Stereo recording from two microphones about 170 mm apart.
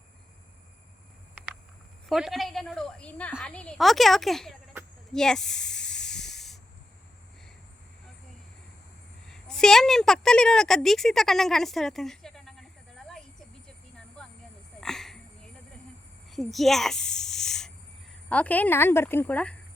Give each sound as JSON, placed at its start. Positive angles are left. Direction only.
{"t": 2.0, "sound": "a woman's voice", "side_deg": 0}
{"t": 5.1, "sound": "snake", "side_deg": 5}
{"t": 9.2, "sound": "a woman's voice", "side_deg": 5}
{"t": 14.8, "sound": "a sound", "side_deg": 0}
{"t": 18.3, "sound": "speech", "side_deg": 10}